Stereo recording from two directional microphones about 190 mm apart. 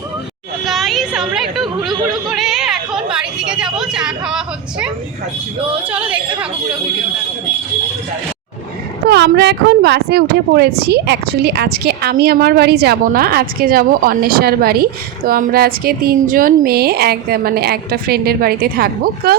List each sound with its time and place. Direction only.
0.6 s a sound: centre (ahead or behind)
5.9 s a woman's voice: 5° right (ahead or behind)
9.0 s speech: 60° right (ahead or behind)